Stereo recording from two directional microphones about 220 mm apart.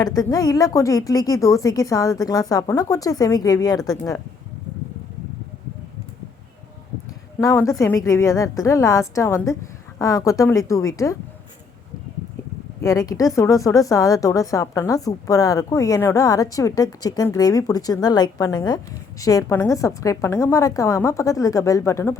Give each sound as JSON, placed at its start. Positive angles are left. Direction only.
{"t": 0.0, "sound": "a woman's voice", "side_deg": 15}
{"t": 7.3, "sound": "a woman's voice", "side_deg": 15}
{"t": 12.8, "sound": "a woman's voice", "side_deg": 15}